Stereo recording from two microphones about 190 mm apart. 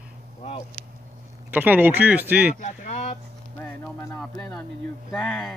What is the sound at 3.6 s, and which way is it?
Music, 10° left (ahead or behind).